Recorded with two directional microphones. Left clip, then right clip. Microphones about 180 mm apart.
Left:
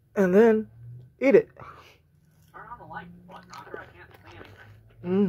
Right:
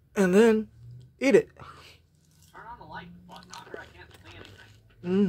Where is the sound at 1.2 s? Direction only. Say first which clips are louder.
Left 2 dB; 20° right (ahead or behind).